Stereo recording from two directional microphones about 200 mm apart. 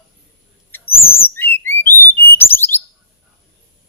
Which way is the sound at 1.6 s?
10° left (ahead or behind).